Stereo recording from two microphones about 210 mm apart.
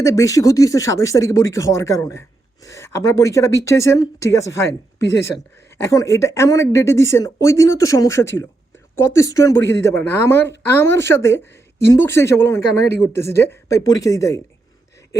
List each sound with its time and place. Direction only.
0.0 s a woman's voice: 15° left (ahead or behind)